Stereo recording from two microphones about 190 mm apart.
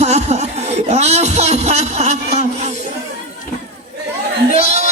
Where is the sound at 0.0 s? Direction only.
35° right (ahead or behind).